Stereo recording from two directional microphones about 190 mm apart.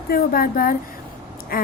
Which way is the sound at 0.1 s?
50° left (ahead or behind).